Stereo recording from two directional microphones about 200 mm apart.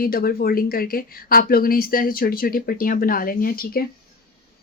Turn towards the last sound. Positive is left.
turn(degrees=45)  # may be behind; listen again after turning